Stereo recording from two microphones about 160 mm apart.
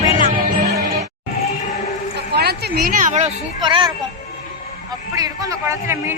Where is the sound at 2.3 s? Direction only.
80° right.